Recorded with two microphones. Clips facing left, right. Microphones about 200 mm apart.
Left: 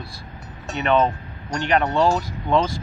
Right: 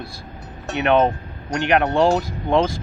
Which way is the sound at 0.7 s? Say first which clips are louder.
Right 2 dB; 65° right (ahead or behind).